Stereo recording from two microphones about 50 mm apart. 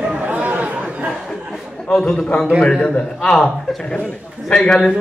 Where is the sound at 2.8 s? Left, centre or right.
Centre.